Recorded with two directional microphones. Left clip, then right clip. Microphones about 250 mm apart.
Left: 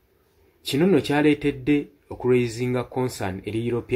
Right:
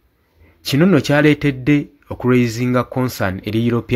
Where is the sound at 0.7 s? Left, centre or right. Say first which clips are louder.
Right 5 dB; right.